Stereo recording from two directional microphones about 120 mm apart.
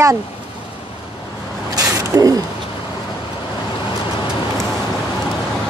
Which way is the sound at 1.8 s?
30° right (ahead or behind).